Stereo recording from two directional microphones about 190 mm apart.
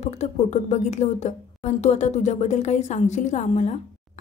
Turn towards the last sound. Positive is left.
turn(degrees=40)  # may be behind; listen again after turning